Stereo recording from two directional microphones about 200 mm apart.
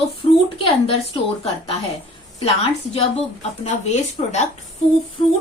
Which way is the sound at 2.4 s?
30° left (ahead or behind).